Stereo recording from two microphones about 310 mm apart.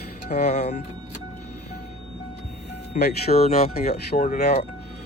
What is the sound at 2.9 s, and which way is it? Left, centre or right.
Speech, left.